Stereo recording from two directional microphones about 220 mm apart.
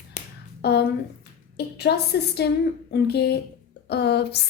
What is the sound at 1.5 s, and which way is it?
A woman's voice, 50° left (ahead or behind).